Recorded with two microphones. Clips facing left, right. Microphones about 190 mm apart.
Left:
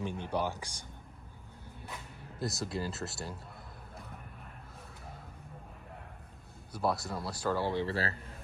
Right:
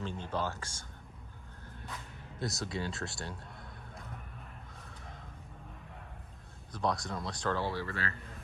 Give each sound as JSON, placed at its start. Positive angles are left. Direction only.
{"t": 0.0, "sound": "speech", "side_deg": 15}
{"t": 2.4, "sound": "speech", "side_deg": 0}
{"t": 6.7, "sound": "speech", "side_deg": 5}
{"t": 7.9, "sound": "a man's voice", "side_deg": 35}